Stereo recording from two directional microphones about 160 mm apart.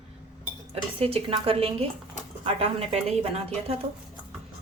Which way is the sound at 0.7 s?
35° right (ahead or behind).